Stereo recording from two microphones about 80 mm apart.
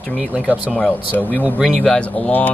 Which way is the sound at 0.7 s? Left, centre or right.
Centre.